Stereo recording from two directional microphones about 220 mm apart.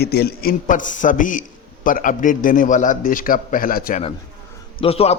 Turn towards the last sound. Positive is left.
turn(degrees=25)  # may be behind; listen again after turning